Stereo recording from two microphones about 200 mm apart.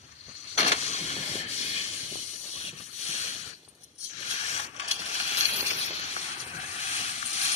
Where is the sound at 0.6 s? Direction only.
35° left (ahead or behind).